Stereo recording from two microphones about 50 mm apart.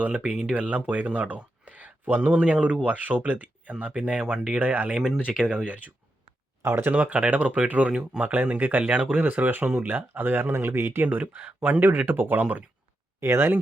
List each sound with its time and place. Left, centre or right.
0.0 s speech: right
2.3 s speech: right
4.2 s speech: centre
4.6 s speech: right
4.9 s speech: centre
6.7 s speech: right
6.9 s speech: right
8.8 s speech: right
11.0 s speech: right
11.9 s speech: right
13.1 s speech: right